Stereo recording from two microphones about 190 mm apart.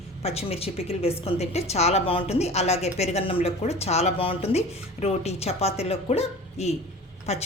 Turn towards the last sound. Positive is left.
turn(degrees=35)  # may be behind; listen again after turning